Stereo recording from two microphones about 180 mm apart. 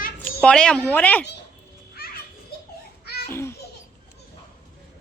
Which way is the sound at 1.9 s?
55° left (ahead or behind).